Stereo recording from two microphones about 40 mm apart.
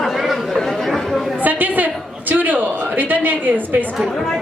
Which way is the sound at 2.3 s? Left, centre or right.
Right.